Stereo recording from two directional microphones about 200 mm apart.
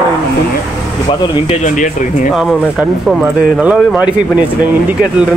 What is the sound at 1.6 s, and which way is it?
Speech, 40° left (ahead or behind).